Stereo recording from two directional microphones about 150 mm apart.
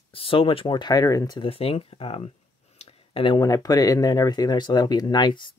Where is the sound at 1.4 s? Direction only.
40° left (ahead or behind).